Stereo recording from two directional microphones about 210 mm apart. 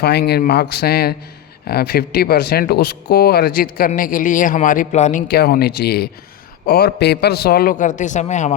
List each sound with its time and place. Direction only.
0.0 s speech: 50° left (ahead or behind); by 8.5 s 35° left (ahead or behind)